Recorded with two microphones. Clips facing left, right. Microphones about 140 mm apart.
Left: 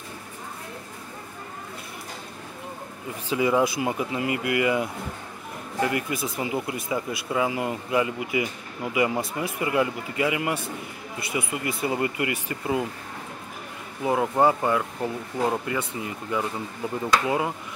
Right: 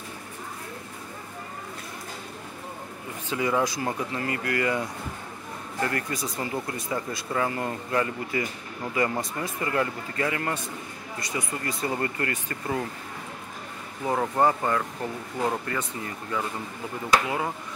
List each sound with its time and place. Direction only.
3.3 s speech: 15° left (ahead or behind)
14.0 s speech: 10° left (ahead or behind)